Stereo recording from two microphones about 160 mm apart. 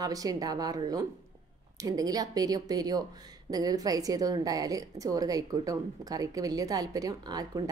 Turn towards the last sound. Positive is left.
turn(degrees=-25)  # may be behind; listen again after turning